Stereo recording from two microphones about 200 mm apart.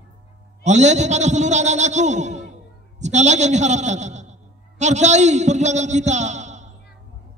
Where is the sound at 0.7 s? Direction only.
35° right (ahead or behind).